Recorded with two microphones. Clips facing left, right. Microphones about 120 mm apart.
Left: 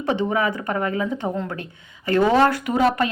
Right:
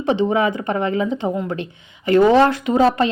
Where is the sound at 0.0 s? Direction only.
20° right (ahead or behind).